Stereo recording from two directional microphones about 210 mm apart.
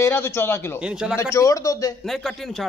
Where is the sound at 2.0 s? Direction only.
Centre (ahead or behind).